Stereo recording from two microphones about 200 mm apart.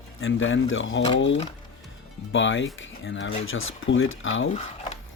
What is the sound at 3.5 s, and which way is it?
Speech, 85° left.